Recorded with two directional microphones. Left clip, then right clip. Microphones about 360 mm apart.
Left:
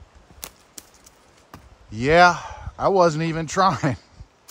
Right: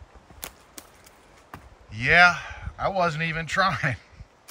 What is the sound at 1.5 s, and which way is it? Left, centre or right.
A man's voice, centre.